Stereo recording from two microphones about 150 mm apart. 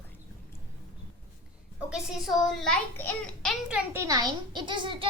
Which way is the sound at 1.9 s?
Centre (ahead or behind).